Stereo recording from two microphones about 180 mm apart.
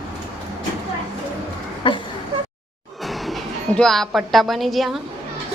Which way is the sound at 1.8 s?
30° left (ahead or behind).